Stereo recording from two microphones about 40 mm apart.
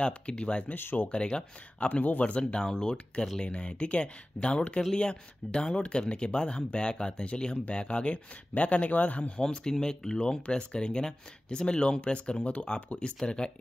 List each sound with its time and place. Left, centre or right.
0.0 s speech: left
1.9 s speech: left
9.4 s speech: centre